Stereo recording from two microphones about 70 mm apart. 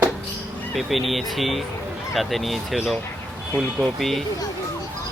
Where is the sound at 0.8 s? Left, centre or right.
Centre.